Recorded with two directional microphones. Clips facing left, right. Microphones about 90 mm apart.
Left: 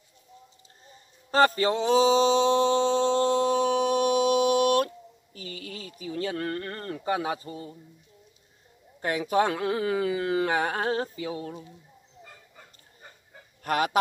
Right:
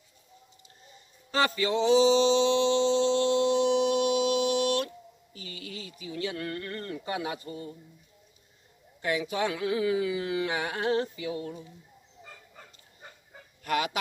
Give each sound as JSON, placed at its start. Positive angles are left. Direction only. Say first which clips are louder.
{"t": 0.8, "sound": "a sound", "louder": "left 3 dB", "side_deg": 40}
{"t": 9.0, "sound": "speech", "louder": "left 4 dB", "side_deg": 45}
{"t": 13.7, "sound": "speech", "louder": "left 3 dB", "side_deg": 45}